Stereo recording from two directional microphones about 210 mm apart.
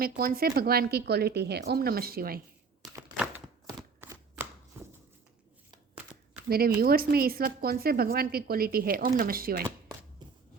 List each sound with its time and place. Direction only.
0.0 s speech: 45° right (ahead or behind)
2.9 s a sound: 10° right (ahead or behind)
6.5 s speech: 45° right (ahead or behind)